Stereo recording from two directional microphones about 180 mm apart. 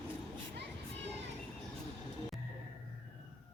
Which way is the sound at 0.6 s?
75° right (ahead or behind).